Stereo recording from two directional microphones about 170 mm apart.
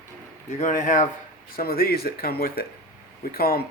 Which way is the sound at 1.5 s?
60° left (ahead or behind).